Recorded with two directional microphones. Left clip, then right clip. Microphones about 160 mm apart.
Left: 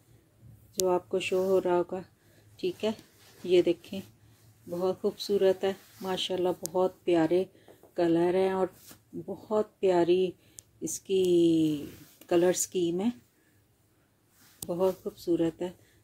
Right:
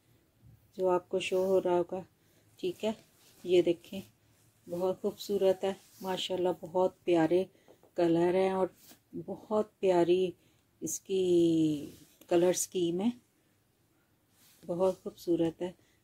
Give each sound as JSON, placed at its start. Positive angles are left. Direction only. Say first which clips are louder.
{"t": 0.7, "sound": "a woman's voice", "louder": "left 2 dB", "side_deg": -10}
{"t": 10.8, "sound": "speech", "louder": "left 4 dB", "side_deg": -5}
{"t": 14.7, "sound": "speech", "louder": "left 2 dB", "side_deg": -10}